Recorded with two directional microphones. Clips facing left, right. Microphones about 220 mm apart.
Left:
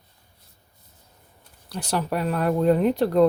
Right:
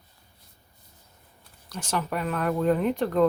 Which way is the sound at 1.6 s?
35° left (ahead or behind).